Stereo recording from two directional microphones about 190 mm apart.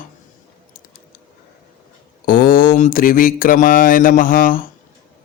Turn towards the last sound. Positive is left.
turn(degrees=50)  # may be behind; listen again after turning